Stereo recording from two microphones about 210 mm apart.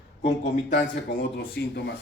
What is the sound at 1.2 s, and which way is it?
Speech, 50° left (ahead or behind).